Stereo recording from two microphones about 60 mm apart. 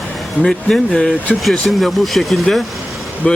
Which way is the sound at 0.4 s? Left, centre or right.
Centre.